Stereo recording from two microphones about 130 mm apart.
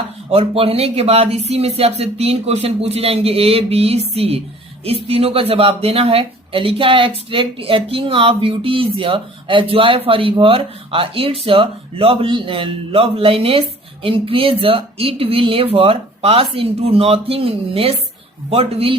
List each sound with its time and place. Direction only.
0.3 s speech: 50° right (ahead or behind)